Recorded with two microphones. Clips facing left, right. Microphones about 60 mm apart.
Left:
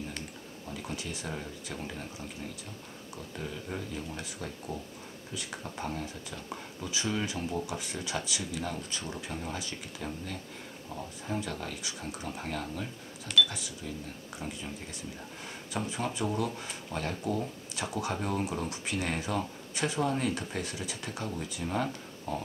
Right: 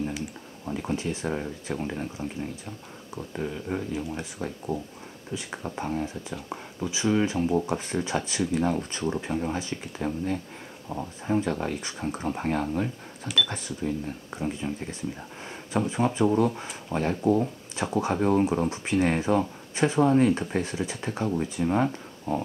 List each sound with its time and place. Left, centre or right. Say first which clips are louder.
0.7 s speech: right 9 dB; right
14.6 s speech: right 9 dB; right